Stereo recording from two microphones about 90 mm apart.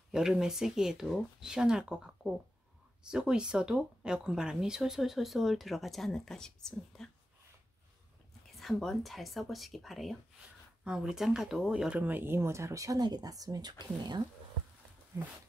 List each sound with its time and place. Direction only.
0.1 s speech: 5° right (ahead or behind)
8.5 s speech: centre (ahead or behind)
12.0 s speech: 20° right (ahead or behind); by 14.2 s 50° right (ahead or behind)